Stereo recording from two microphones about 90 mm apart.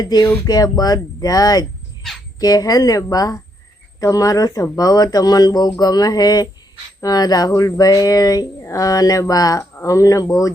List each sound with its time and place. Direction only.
0.0 s speech: 45° left (ahead or behind)